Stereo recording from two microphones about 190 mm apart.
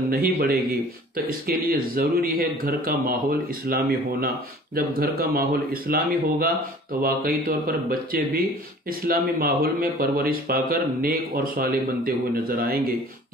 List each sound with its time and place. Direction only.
0.1 s speech: 50° right (ahead or behind)